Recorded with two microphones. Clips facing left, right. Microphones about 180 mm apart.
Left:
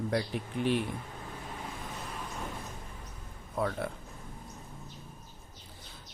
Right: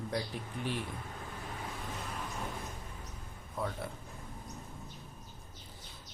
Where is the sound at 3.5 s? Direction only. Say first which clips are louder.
Left 6 dB; 65° left (ahead or behind).